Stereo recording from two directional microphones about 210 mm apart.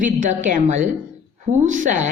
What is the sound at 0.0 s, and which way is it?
A woman's voice, 35° right (ahead or behind).